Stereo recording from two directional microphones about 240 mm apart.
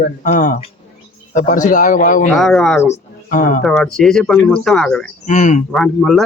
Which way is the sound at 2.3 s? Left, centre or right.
Centre.